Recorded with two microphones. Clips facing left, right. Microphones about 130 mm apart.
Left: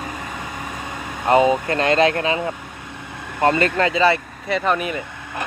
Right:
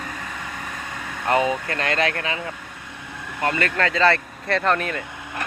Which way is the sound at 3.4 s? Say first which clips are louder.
Left 6 dB; 30° left (ahead or behind).